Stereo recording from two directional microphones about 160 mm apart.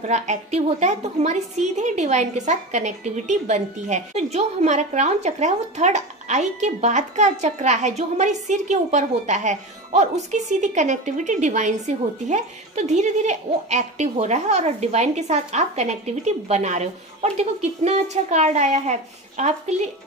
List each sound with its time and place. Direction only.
0.0 s a woman's voice: 45° right (ahead or behind)